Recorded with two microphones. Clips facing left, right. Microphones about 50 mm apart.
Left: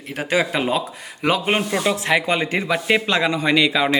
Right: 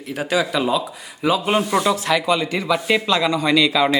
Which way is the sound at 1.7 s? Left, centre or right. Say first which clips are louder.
Right 1 dB; left.